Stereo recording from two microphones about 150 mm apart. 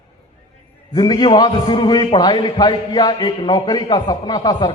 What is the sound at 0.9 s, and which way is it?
A man's voice, 25° left (ahead or behind).